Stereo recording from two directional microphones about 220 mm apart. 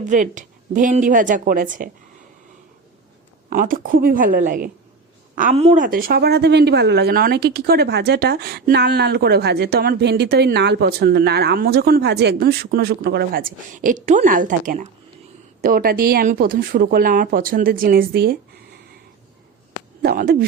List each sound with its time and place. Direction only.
0.0 s speech: 35° right (ahead or behind)
3.5 s a woman's voice: 40° right (ahead or behind)
20.0 s speech: 45° right (ahead or behind)